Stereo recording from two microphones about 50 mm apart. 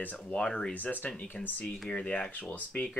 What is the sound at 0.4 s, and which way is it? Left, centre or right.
Speech, centre.